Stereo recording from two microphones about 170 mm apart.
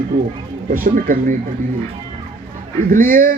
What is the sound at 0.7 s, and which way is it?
Speech, 55° right (ahead or behind).